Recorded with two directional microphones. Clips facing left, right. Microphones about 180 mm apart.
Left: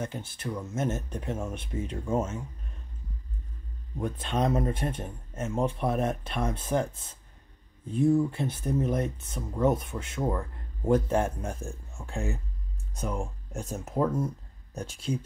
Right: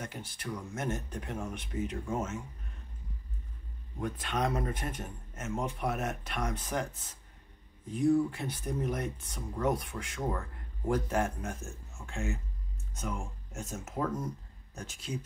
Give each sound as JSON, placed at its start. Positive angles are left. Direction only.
{"t": 0.0, "sound": "speech", "side_deg": 25}
{"t": 4.0, "sound": "speech", "side_deg": 25}